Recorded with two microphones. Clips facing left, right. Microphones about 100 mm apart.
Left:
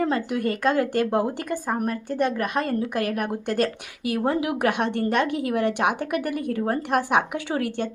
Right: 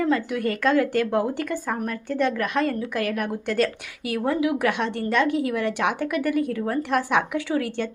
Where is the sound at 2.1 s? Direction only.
45° left (ahead or behind).